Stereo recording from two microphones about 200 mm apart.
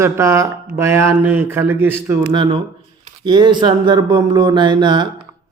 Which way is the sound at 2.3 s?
25° right (ahead or behind).